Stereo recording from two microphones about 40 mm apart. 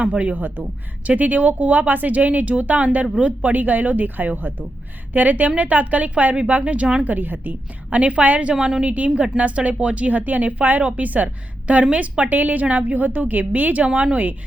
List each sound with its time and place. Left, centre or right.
0.0 s speech: right
0.4 s a man's voice: right
1.0 s a woman's voice: right
7.0 s a woman's voice: right
7.9 s speech: right
12.3 s a woman's voice: right